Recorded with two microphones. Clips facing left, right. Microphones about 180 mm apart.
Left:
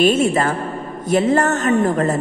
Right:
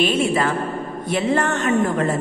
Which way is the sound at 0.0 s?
45° left (ahead or behind).